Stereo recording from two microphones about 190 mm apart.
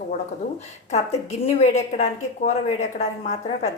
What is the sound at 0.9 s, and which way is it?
A woman's voice, 35° left (ahead or behind).